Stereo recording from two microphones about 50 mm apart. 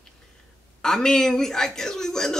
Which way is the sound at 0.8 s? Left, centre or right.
Centre.